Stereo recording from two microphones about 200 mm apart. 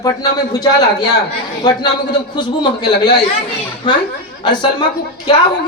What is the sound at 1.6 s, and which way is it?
Speech, 20° left (ahead or behind).